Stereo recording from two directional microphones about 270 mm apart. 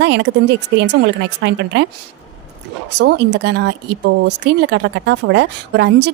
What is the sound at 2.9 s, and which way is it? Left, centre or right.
A woman's voice, right.